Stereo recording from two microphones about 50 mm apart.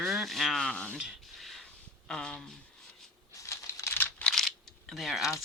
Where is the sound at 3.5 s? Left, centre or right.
Left.